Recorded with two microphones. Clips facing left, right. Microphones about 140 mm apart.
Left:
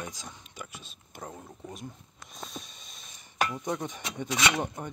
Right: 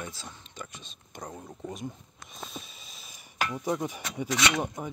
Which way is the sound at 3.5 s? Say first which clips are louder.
Right 3 dB; 5° right (ahead or behind).